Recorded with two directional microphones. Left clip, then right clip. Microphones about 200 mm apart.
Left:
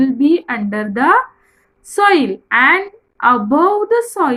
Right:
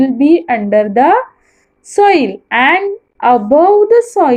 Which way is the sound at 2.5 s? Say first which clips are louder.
Right 1 dB; 25° left (ahead or behind).